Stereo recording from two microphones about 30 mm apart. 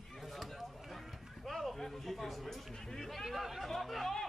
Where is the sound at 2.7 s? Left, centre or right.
Left.